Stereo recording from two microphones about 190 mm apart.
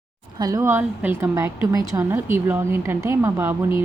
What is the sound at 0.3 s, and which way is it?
A woman's voice, 20° right (ahead or behind).